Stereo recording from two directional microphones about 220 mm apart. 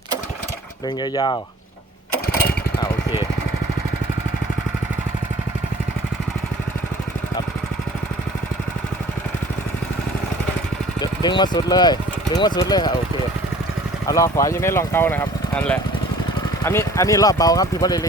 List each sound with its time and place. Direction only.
1.1 s speech: 20° left (ahead or behind)
11.0 s speech: 20° left (ahead or behind)
14.1 s speech: 15° left (ahead or behind)